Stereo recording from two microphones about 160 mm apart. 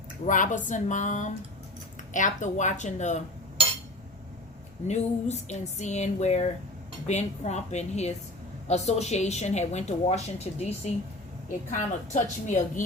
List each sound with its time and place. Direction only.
0.3 s a woman's voice: 50° left (ahead or behind)
4.9 s a woman's voice: 45° left (ahead or behind)